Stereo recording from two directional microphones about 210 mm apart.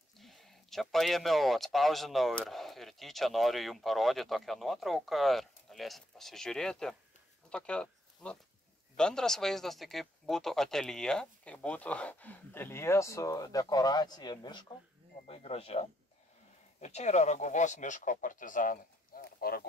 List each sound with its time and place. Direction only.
0.2 s speech: centre (ahead or behind); by 19.6 s 45° left (ahead or behind)